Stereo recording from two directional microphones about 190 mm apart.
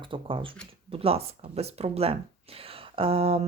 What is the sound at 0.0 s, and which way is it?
Speech, 25° right (ahead or behind).